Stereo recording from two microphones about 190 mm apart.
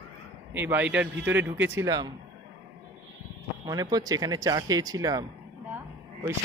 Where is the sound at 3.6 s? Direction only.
20° right (ahead or behind).